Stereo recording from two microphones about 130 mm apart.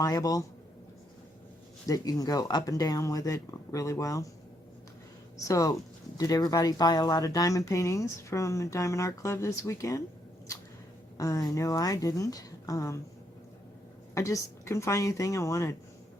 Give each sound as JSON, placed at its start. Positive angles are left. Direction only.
{"t": 0.0, "sound": "speech", "side_deg": 25}
{"t": 1.9, "sound": "speech", "side_deg": 30}
{"t": 5.4, "sound": "speech", "side_deg": 25}
{"t": 11.2, "sound": "speech", "side_deg": 25}
{"t": 14.1, "sound": "speech", "side_deg": 25}